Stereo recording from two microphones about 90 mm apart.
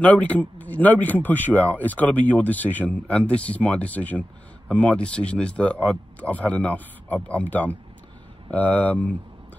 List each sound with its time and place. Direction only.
0.0 s speech: 15° left (ahead or behind)